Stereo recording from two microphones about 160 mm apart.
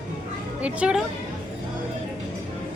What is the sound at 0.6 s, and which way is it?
Speech, 5° right (ahead or behind).